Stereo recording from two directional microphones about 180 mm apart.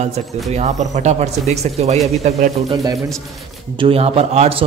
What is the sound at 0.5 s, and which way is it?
A man's voice, 40° right (ahead or behind).